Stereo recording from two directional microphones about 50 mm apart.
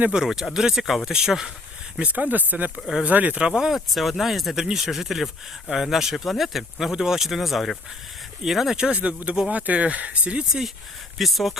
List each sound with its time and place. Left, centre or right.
0.1 s speech: centre
2.0 s speech: right
3.8 s speech: centre; by 10.4 s right
11.2 s speech: centre